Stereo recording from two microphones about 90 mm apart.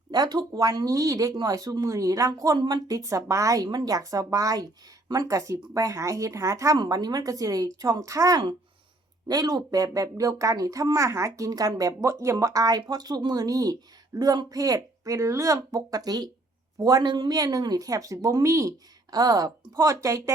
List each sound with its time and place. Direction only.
0.1 s speech: 50° right (ahead or behind)